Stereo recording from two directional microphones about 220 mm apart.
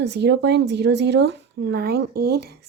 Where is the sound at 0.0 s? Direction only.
50° right (ahead or behind).